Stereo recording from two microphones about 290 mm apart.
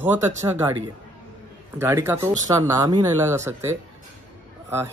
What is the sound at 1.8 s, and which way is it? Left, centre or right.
Speech, centre.